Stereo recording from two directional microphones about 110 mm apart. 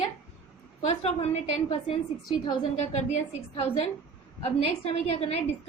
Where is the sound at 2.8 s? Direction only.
90° left.